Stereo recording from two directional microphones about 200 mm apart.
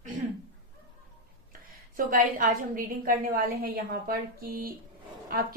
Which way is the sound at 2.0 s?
45° right (ahead or behind).